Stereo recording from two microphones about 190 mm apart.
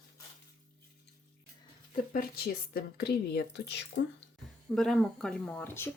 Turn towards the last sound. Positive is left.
turn(degrees=10)  # may be behind; listen again after turning